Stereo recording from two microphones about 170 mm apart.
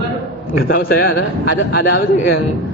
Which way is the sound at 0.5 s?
60° left (ahead or behind).